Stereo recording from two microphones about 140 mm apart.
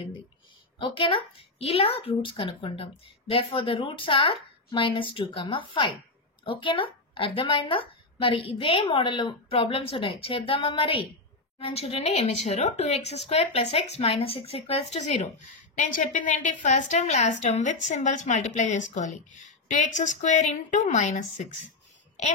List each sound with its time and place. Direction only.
0.7 s a woman's voice: 35° left (ahead or behind); by 21.5 s 60° left (ahead or behind)